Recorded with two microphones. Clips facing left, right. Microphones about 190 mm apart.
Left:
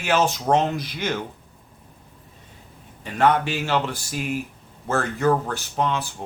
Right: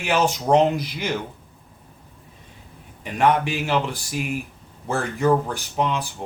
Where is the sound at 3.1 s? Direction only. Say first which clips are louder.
Even; 15° right (ahead or behind).